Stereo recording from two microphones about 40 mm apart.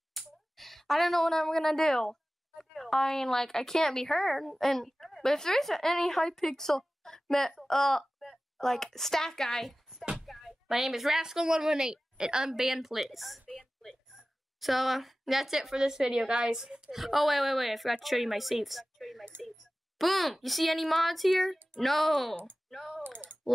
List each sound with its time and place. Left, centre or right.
0.2 s a sound: centre
0.6 s a woman's voice: centre
7.6 s a sound: centre
8.5 s a woman's voice: centre
10.2 s music: centre
10.8 s a woman's voice: centre
14.6 s a woman's voice: centre
16.9 s speech: centre
22.7 s typing: centre
23.0 s typing: right